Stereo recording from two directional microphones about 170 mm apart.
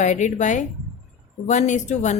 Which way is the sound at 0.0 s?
45° left (ahead or behind).